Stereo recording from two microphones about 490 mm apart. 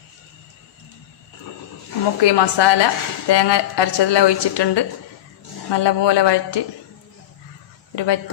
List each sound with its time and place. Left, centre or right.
2.2 s a woman's voice: left
7.9 s a woman's voice: left